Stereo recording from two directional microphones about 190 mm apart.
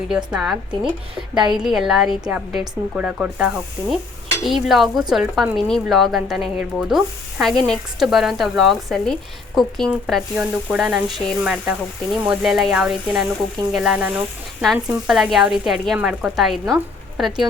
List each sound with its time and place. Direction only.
0.1 s speech: 5° right (ahead or behind)
1.1 s a woman's voice: 25° right (ahead or behind)
1.5 s speech: centre (ahead or behind)